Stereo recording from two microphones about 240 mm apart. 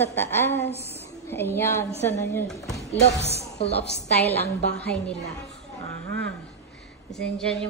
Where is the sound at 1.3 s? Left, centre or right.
Centre.